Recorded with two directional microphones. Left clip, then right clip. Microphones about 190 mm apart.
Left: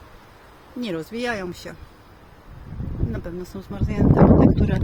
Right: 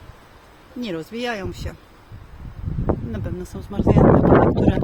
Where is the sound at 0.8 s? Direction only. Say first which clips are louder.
Even; centre (ahead or behind).